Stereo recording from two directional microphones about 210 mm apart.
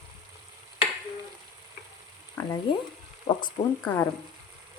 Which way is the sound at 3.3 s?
20° left (ahead or behind).